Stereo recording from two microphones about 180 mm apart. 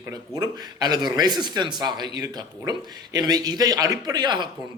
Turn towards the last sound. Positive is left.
turn(degrees=-25)  # may be behind; listen again after turning